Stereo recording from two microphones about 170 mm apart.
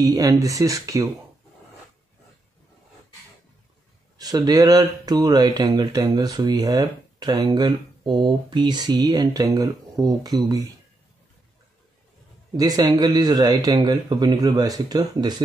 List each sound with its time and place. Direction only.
0.0 s speech: 20° right (ahead or behind)
4.2 s speech: 20° right (ahead or behind)
12.5 s speech: 20° right (ahead or behind)